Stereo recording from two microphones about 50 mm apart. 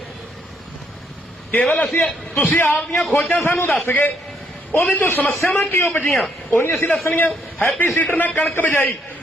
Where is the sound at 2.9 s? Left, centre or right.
Centre.